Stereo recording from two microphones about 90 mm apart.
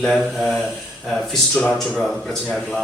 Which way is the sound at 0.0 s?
5° left (ahead or behind).